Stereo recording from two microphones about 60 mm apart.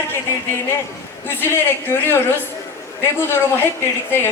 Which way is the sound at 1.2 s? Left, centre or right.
Left.